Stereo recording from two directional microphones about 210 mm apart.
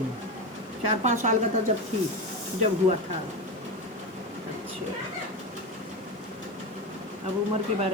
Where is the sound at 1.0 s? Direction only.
35° right (ahead or behind).